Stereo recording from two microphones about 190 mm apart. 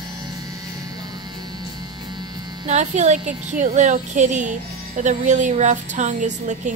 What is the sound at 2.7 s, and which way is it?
A woman's voice, 35° right (ahead or behind).